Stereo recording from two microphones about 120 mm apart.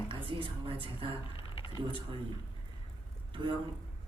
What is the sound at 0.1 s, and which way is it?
Speech, 45° right (ahead or behind).